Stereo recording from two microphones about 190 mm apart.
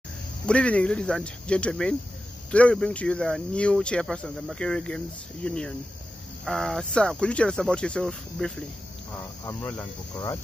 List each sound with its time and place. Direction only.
0.5 s speech: 5° left (ahead or behind)